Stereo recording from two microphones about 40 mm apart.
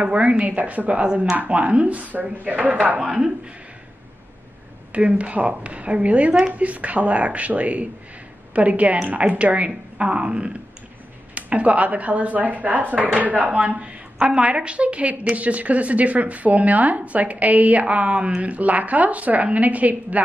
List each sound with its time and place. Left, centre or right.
0.0 s a woman's voice: right
3.0 s speech: right
4.9 s a woman's voice: right
14.1 s a woman's voice: right